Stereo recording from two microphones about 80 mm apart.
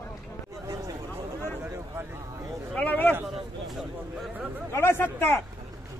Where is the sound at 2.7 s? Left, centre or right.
Centre.